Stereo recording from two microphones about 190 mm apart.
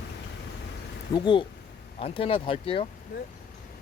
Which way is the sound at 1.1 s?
25° left (ahead or behind).